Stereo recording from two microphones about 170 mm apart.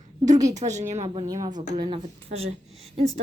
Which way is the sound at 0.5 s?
45° right (ahead or behind).